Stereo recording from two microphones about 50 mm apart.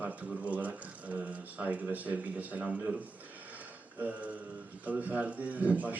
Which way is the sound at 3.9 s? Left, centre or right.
Right.